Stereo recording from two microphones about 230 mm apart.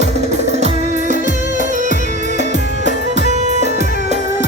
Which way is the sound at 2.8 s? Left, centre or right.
Right.